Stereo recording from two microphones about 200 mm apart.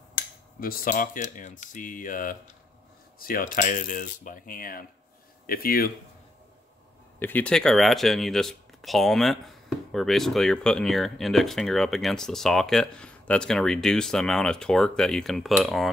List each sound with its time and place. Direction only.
0.6 s speech: 45° left (ahead or behind)
7.2 s speech: 10° left (ahead or behind)